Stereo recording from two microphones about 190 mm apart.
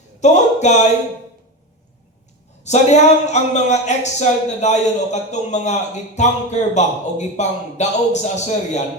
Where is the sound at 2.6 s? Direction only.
35° left (ahead or behind).